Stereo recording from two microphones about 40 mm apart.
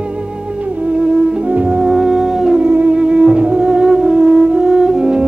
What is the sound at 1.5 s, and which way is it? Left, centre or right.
Music, right.